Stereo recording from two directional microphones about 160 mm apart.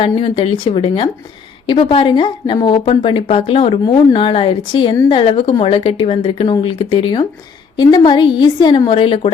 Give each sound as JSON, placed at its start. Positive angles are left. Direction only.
{"t": 0.0, "sound": "a woman's voice", "side_deg": 35}